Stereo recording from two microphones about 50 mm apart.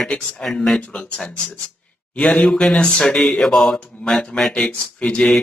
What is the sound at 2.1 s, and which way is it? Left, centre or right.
Speech, centre.